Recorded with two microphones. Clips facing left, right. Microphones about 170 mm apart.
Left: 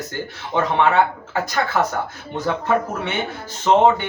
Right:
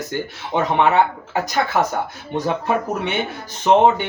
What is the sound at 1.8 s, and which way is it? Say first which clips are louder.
Speech: right 1 dB; 15° right (ahead or behind).